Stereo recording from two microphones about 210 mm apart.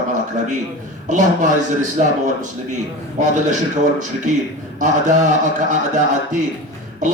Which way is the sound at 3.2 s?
35° right (ahead or behind).